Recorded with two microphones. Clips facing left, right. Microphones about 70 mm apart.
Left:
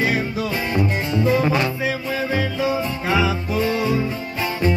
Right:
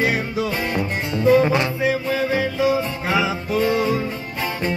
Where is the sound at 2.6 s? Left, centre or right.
Centre.